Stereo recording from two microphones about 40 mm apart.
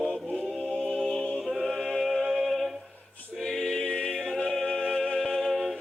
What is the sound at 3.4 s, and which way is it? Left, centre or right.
Choir, centre.